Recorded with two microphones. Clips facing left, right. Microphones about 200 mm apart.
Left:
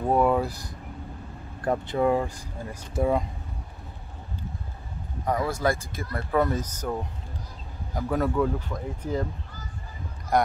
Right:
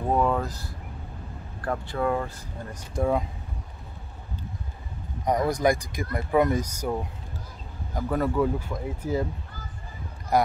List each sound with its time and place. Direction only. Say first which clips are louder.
0.1 s a sound: left 2 dB; 10° left (ahead or behind)
1.6 s speech: left 3 dB; 20° left (ahead or behind)
2.9 s speech: left 1 dB; centre (ahead or behind)
5.2 s speech: right 3 dB; 15° right (ahead or behind)
7.9 s speech: even; centre (ahead or behind)
10.3 s speech: right 1 dB; 5° right (ahead or behind)